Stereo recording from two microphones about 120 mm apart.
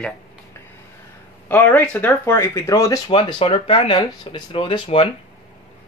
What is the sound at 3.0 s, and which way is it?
Speech, 45° left (ahead or behind).